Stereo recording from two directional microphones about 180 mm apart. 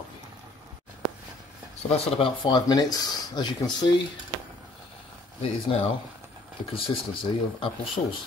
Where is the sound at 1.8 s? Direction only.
30° left (ahead or behind).